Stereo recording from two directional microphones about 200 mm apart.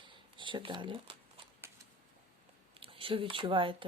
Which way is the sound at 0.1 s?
25° right (ahead or behind).